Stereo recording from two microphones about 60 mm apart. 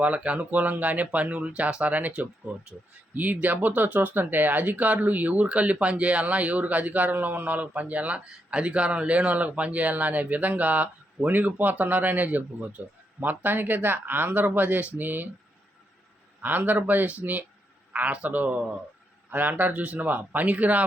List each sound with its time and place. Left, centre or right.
0.0 s speech: right
16.4 s speech: right